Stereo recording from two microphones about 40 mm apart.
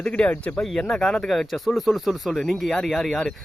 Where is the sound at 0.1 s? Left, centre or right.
Left.